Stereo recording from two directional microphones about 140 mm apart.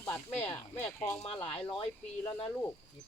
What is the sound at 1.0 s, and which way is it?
Speech, 30° left (ahead or behind).